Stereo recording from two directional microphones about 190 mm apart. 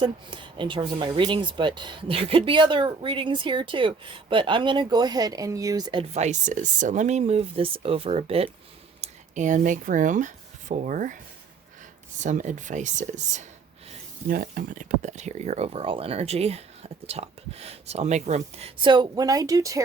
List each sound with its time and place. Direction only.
0.0 s speech: 25° right (ahead or behind); by 11.2 s 45° right (ahead or behind)
12.2 s speech: 40° right (ahead or behind); by 19.8 s 15° right (ahead or behind)